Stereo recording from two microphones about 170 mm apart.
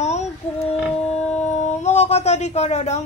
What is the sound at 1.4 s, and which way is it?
Speech, 45° left (ahead or behind).